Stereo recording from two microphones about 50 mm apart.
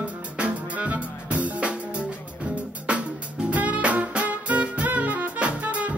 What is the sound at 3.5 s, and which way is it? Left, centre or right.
Music, right.